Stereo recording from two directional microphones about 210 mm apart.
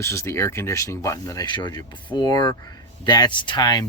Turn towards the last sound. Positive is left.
turn(degrees=20)  # may be behind; listen again after turning